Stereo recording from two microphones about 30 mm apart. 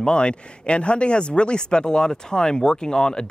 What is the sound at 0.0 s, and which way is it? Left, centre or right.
Speech, left.